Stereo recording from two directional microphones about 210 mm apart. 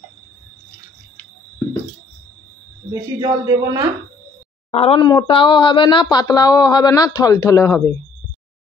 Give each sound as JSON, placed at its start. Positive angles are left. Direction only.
{"t": 2.9, "sound": "speech", "side_deg": -15}
{"t": 4.6, "sound": "speech", "side_deg": 30}